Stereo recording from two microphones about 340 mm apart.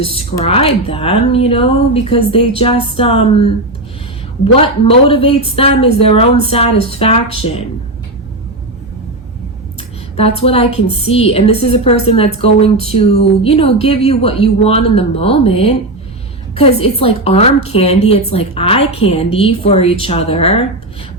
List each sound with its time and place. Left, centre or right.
0.0 s a woman's voice: centre
4.6 s a woman's voice: centre
10.2 s a woman's voice: centre